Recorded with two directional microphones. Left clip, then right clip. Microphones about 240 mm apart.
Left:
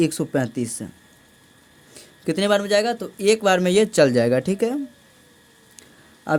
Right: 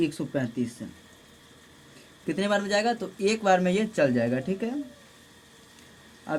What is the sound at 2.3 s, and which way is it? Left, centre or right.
Speech, left.